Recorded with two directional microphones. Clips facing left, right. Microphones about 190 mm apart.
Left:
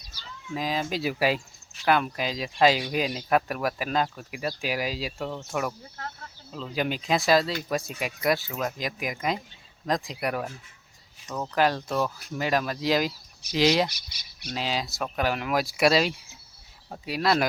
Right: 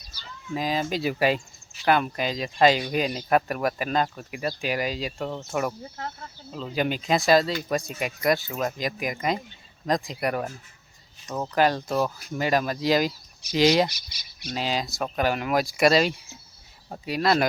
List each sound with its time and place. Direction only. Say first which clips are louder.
0.5 s speech: right 2 dB; centre (ahead or behind)
5.3 s speech: right 2 dB; 10° right (ahead or behind)
11.5 s speech: right 2 dB; centre (ahead or behind)
13.9 s speech: right 1 dB; 55° left (ahead or behind)
14.5 s speech: right 2 dB; centre (ahead or behind)